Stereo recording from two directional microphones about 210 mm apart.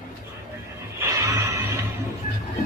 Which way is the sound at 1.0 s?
15° right (ahead or behind).